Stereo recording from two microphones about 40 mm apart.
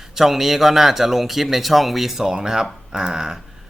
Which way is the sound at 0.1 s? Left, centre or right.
Centre.